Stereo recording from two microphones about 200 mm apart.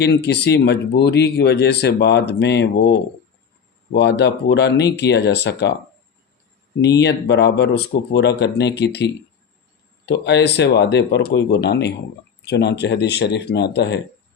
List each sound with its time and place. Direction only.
0.0 s speech: 55° left (ahead or behind)
7.0 s speech: 60° left (ahead or behind)